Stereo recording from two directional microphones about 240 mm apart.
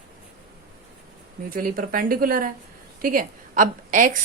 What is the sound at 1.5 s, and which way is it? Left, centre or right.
A woman's voice, right.